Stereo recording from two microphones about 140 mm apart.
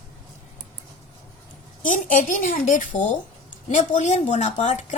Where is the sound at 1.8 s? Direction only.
70° left (ahead or behind).